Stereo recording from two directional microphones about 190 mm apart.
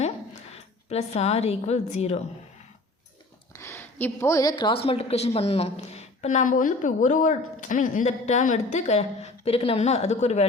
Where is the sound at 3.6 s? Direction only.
10° left (ahead or behind).